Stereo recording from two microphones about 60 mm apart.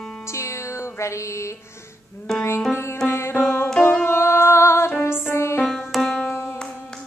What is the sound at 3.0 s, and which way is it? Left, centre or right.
Music, left.